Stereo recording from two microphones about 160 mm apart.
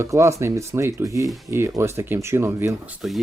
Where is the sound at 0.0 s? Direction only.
20° right (ahead or behind).